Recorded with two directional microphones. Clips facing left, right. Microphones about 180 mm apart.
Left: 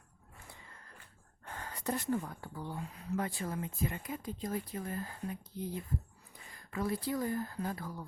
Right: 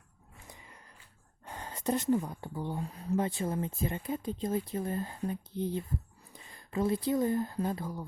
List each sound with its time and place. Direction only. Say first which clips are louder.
0.4 s a sound: right 2 dB; 15° right (ahead or behind)
1.5 s speech: right 5 dB; 20° right (ahead or behind)
2.9 s speech: right 6 dB; 35° right (ahead or behind)
3.2 s speech: right 5 dB; 25° right (ahead or behind)